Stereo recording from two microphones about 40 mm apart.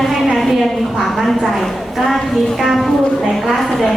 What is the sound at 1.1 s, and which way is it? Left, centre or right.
A woman's voice, centre.